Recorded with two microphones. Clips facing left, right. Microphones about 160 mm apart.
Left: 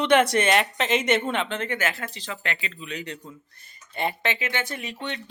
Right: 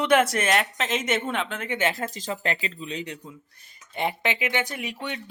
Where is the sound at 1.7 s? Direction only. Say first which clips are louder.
Right 2 dB; 30° right (ahead or behind).